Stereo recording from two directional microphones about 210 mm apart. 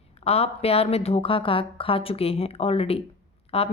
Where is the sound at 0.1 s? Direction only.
30° left (ahead or behind).